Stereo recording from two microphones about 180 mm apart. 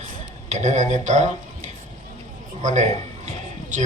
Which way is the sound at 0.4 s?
40° right (ahead or behind).